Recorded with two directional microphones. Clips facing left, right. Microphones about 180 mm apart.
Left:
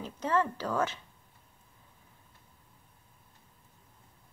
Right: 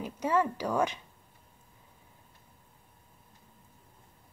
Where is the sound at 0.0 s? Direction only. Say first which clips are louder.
Right 1 dB; 10° right (ahead or behind).